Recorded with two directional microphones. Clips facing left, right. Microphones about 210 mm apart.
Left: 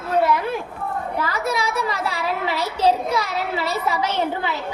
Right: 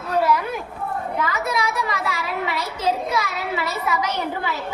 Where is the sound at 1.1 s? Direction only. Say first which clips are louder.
Left 1 dB; 35° left (ahead or behind).